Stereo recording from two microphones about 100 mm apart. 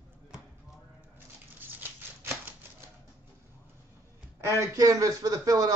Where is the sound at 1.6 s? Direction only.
20° right (ahead or behind).